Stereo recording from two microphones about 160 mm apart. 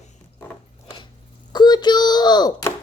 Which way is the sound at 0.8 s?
30° left (ahead or behind).